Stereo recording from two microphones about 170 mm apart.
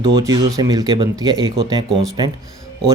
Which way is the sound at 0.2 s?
20° right (ahead or behind).